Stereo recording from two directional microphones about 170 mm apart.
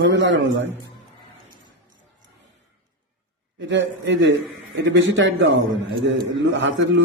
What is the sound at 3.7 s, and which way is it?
A man's voice, 90° right.